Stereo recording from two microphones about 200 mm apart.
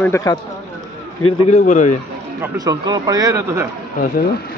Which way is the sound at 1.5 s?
40° left (ahead or behind).